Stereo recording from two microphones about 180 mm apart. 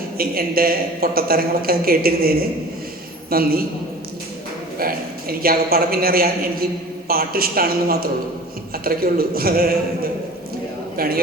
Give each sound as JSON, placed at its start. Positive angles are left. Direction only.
{"t": 0.2, "sound": "a woman's voice", "side_deg": -55}
{"t": 4.8, "sound": "a woman's voice", "side_deg": -55}